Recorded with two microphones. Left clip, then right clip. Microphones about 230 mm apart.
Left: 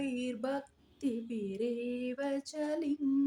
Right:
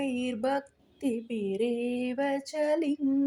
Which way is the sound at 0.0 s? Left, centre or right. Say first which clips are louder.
Right 6 dB; right.